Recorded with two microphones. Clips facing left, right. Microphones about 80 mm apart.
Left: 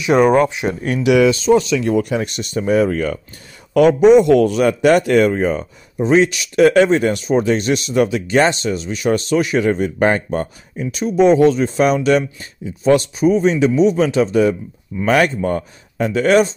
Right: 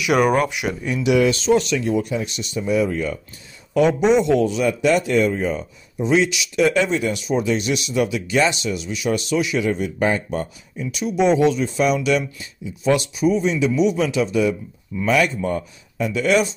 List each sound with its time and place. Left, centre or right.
0.0 s speech: left
1.8 s speech: left